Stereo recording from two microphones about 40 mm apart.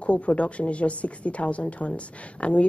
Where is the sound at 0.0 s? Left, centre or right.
Left.